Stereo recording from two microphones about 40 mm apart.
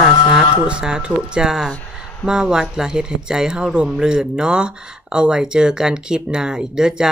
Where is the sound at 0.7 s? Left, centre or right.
Right.